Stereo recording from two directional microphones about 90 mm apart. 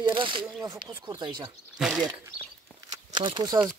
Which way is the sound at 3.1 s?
55° right (ahead or behind).